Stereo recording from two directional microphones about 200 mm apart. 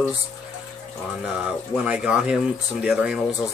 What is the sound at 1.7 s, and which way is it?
Speech, 5° right (ahead or behind).